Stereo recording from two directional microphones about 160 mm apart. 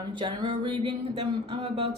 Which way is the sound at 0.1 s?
30° right (ahead or behind).